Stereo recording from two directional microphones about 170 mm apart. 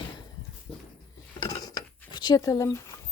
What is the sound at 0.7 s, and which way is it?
Dog, 5° left (ahead or behind).